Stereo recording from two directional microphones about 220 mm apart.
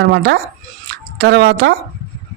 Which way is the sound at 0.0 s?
50° right (ahead or behind).